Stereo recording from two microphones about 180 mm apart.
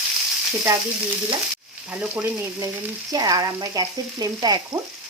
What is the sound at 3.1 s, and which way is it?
Frying, 20° right (ahead or behind).